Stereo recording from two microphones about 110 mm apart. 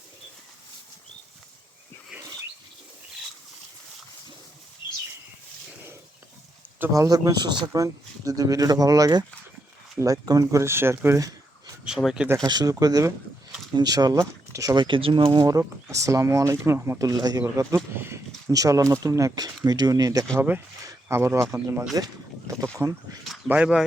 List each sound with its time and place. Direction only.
4.8 s a sound: 45° left (ahead or behind)
6.9 s speech: 30° right (ahead or behind)
11.9 s speech: 5° right (ahead or behind)
12.4 s speech: 35° right (ahead or behind)
14.8 s speech: 50° right (ahead or behind)
15.4 s speech: 30° right (ahead or behind)
17.6 s speech: 25° right (ahead or behind)
18.4 s speech: 30° right (ahead or behind)
21.9 s boat: 30° right (ahead or behind)